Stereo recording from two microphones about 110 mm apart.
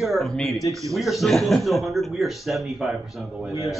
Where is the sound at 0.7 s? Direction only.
30° right (ahead or behind).